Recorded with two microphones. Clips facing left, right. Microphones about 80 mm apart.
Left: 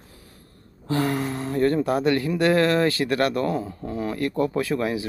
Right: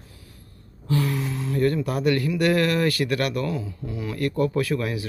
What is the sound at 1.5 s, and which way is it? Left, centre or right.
Speech, left.